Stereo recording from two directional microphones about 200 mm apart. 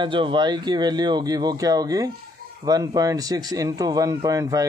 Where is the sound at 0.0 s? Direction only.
25° right (ahead or behind).